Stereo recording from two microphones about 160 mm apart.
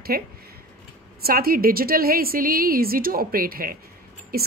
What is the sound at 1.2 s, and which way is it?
A woman's voice, 65° right (ahead or behind).